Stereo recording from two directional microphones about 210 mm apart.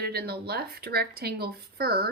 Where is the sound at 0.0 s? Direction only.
50° right (ahead or behind).